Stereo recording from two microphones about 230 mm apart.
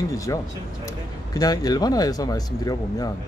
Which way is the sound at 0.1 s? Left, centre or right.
Centre.